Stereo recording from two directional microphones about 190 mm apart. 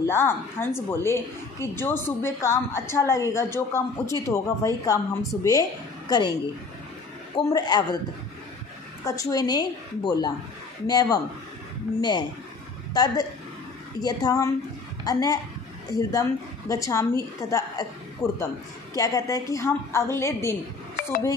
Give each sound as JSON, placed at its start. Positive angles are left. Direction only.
{"t": 0.0, "sound": "a woman's voice", "side_deg": 15}
{"t": 7.3, "sound": "a woman's voice", "side_deg": 20}
{"t": 9.0, "sound": "a woman's voice", "side_deg": 20}
{"t": 18.2, "sound": "speech", "side_deg": 0}
{"t": 18.9, "sound": "a woman's voice", "side_deg": 15}